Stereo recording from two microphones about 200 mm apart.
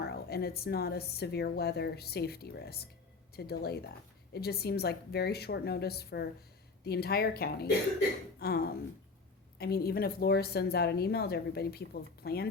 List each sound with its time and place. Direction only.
0.0 s a woman's voice: 50° left (ahead or behind)